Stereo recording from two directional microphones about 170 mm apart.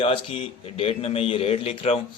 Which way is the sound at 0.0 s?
35° left (ahead or behind).